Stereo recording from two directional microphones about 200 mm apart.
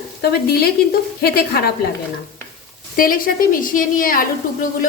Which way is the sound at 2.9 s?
45° left (ahead or behind).